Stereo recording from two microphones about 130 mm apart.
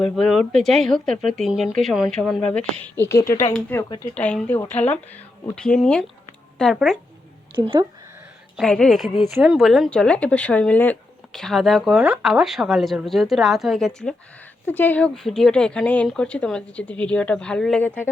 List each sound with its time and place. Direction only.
0.0 s speech: centre (ahead or behind)
7.5 s speech: 40° right (ahead or behind)
8.6 s speech: 5° left (ahead or behind)
14.7 s speech: 15° left (ahead or behind)